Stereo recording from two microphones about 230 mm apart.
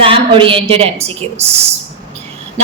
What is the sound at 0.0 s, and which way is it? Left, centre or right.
Speech, right.